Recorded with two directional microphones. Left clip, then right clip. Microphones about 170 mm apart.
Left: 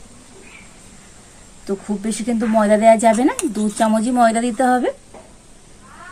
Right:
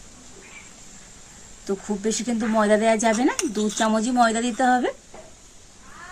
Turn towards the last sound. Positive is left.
turn(degrees=0)  # may be behind; listen again after turning